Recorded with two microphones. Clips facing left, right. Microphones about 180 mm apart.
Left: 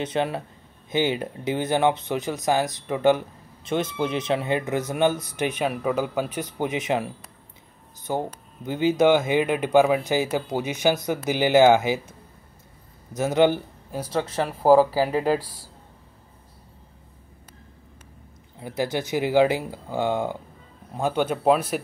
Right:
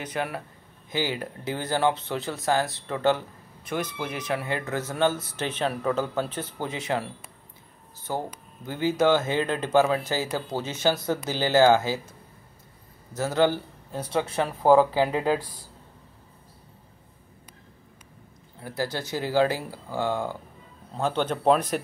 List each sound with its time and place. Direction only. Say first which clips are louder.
0.0 s speech: left 5 dB; 25° left (ahead or behind)
8.1 s speech: left 4 dB; 20° left (ahead or behind)
13.1 s speech: left 3 dB; 20° left (ahead or behind)
14.1 s speech: even; centre (ahead or behind)
18.6 s speech: left 4 dB; 20° left (ahead or behind)